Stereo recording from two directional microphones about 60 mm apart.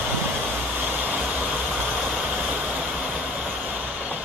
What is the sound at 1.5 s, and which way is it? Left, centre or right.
Vehicle, centre.